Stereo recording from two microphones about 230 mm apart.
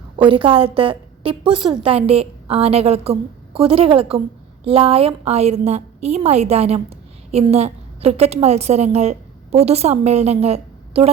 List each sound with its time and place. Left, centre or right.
0.2 s a woman's voice: right